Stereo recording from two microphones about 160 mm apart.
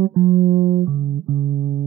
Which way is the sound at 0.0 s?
40° right (ahead or behind).